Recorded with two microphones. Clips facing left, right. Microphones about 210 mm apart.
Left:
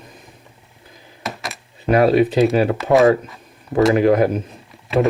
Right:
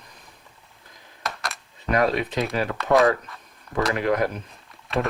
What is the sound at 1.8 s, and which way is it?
Speech, 30° left (ahead or behind).